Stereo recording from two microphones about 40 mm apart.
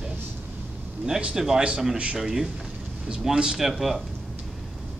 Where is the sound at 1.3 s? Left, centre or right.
Centre.